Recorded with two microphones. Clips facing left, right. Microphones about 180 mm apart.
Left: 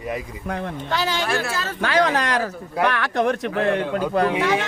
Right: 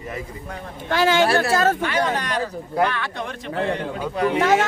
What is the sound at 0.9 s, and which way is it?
Speech, 55° right (ahead or behind).